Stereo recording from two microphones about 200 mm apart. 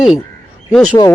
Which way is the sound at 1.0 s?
25° left (ahead or behind).